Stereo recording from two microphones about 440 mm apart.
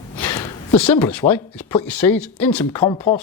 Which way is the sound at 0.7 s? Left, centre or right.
Left.